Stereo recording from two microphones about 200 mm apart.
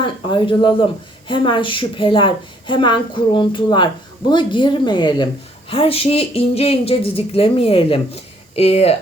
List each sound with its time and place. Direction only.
0.0 s a woman's voice: 25° left (ahead or behind)